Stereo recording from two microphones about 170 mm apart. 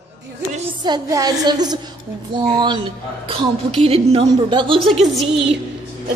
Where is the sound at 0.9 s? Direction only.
20° right (ahead or behind).